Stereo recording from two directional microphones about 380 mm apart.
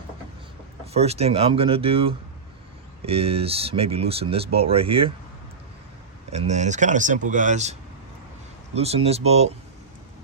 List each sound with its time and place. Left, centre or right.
0.9 s speech: centre
6.3 s speech: centre